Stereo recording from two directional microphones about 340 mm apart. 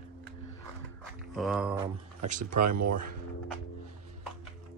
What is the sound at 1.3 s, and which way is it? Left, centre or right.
Speech, centre.